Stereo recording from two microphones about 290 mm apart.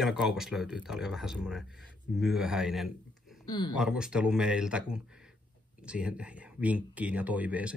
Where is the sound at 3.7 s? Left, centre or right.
Centre.